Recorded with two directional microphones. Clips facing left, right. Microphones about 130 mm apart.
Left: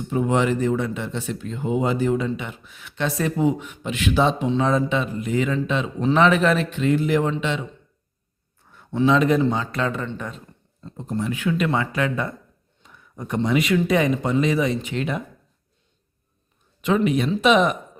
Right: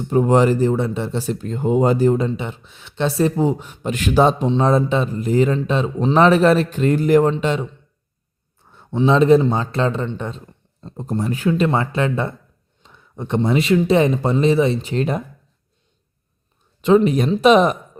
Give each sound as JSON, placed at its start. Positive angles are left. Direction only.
{"t": 0.1, "sound": "speech", "side_deg": -40}
{"t": 4.4, "sound": "speech", "side_deg": -30}
{"t": 8.7, "sound": "a sound", "side_deg": -25}
{"t": 9.0, "sound": "speech", "side_deg": -30}
{"t": 16.8, "sound": "speech", "side_deg": -35}